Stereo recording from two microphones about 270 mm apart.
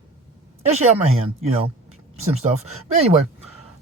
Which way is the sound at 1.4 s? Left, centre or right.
Right.